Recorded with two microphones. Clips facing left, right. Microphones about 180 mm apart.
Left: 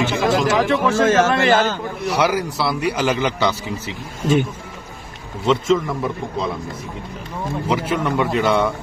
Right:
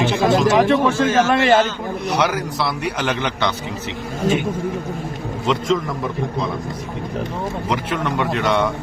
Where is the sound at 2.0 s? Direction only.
5° left (ahead or behind).